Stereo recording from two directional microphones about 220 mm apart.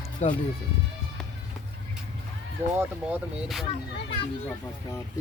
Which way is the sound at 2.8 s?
5° right (ahead or behind).